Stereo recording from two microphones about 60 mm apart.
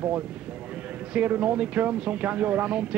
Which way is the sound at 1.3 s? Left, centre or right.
Right.